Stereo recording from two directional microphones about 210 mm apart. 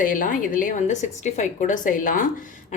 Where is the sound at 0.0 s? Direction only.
40° left (ahead or behind).